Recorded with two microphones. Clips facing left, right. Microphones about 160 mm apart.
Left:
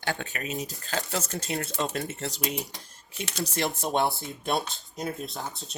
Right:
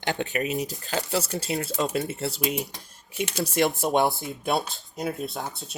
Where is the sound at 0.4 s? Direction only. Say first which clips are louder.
Right 1 dB; 40° left (ahead or behind).